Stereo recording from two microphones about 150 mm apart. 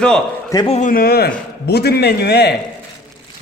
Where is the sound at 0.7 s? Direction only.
55° left (ahead or behind).